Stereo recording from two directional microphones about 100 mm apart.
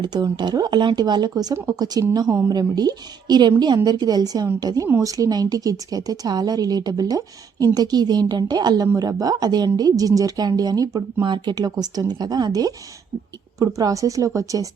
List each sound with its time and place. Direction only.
0.0 s speech: 50° right (ahead or behind)